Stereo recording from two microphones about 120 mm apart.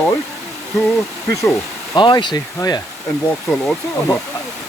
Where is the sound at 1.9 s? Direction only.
40° left (ahead or behind).